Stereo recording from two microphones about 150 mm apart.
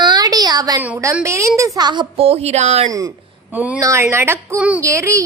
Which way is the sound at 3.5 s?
10° right (ahead or behind).